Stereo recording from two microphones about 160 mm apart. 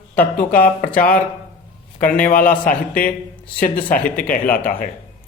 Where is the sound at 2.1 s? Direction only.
60° left (ahead or behind).